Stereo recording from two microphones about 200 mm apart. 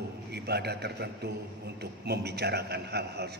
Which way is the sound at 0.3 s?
55° right (ahead or behind).